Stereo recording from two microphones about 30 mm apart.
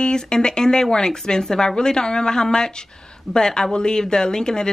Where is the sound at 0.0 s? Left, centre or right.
Left.